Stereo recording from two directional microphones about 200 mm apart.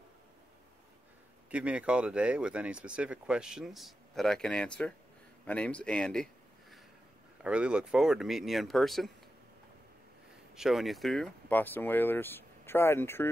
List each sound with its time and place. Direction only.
1.5 s speech: 5° right (ahead or behind)
7.4 s speech: 5° right (ahead or behind)
10.5 s speech: centre (ahead or behind)